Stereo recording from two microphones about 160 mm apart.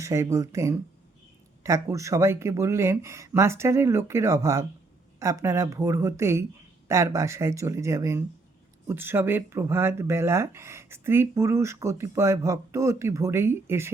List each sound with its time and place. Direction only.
0.0 s speech: 20° right (ahead or behind)